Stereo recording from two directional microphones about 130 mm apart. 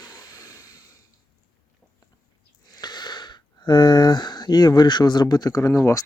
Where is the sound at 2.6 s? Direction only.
30° left (ahead or behind).